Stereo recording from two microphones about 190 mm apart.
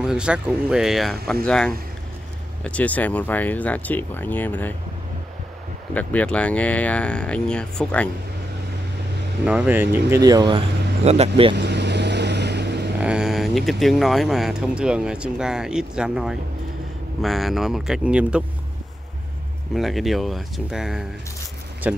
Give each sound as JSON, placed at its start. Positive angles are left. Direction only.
{"t": 0.0, "sound": "speech", "side_deg": -5}
{"t": 5.9, "sound": "speech", "side_deg": 5}
{"t": 9.5, "sound": "speech", "side_deg": -10}
{"t": 11.5, "sound": "vehicle", "side_deg": -65}
{"t": 13.0, "sound": "speech", "side_deg": -5}
{"t": 19.7, "sound": "speech", "side_deg": 0}